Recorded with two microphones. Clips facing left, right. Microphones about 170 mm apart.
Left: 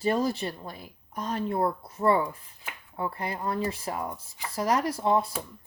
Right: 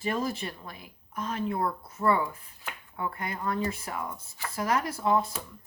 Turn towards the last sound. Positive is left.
turn(degrees=30)  # may be behind; listen again after turning